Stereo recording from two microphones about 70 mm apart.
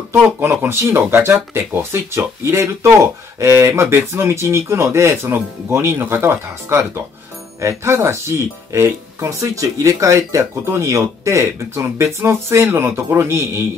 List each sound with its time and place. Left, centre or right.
0.1 s speech: right